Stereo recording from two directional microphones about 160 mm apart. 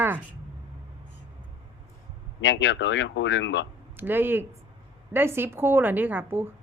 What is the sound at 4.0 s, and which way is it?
A woman's voice, 15° right (ahead or behind).